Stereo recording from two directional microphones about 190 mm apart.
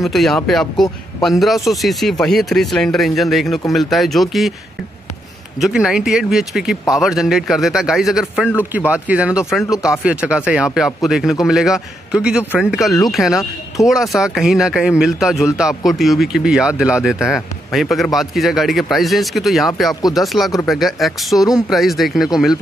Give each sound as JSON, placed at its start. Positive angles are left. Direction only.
{"t": 0.0, "sound": "speech", "side_deg": 0}
{"t": 5.6, "sound": "speech", "side_deg": -5}
{"t": 19.9, "sound": "speech", "side_deg": 20}
{"t": 20.6, "sound": "speech", "side_deg": 0}